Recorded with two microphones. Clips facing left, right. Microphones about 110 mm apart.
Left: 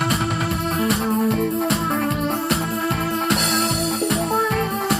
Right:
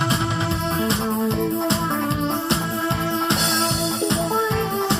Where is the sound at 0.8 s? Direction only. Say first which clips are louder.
Left 3 dB; 25° right (ahead or behind).